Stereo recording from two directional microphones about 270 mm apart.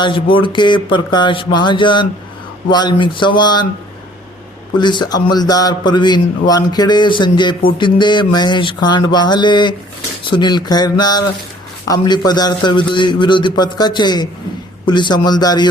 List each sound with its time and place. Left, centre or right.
0.3 s speech: centre
4.8 s speech: centre